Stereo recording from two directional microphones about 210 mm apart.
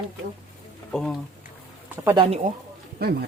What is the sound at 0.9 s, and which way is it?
Speech, 5° left (ahead or behind).